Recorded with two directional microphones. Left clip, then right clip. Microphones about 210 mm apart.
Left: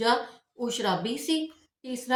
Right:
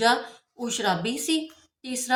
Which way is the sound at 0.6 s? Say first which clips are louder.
Right 2 dB; 45° right (ahead or behind).